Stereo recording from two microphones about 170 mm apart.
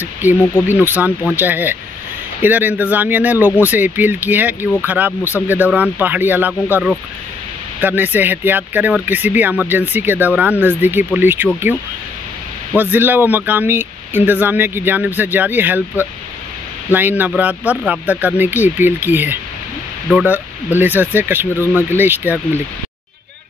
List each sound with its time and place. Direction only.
0.0 s speech: 10° right (ahead or behind)
0.4 s speech: 10° left (ahead or behind)
0.7 s speech: 10° right (ahead or behind)
12.7 s speech: 10° right (ahead or behind)